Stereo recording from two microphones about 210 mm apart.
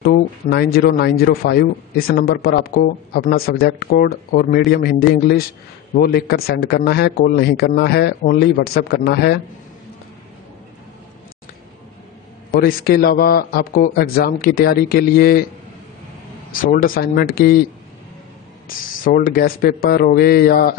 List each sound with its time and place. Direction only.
0.0 s a man's voice: 50° left (ahead or behind)
12.5 s a man's voice: 45° left (ahead or behind)
16.6 s a man's voice: 40° left (ahead or behind)
19.0 s a man's voice: 45° left (ahead or behind)